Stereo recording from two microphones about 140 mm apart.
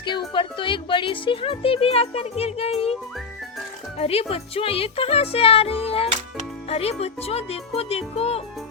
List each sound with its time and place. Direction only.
0.0 s speech: 35° left (ahead or behind)
3.9 s speech: 45° left (ahead or behind)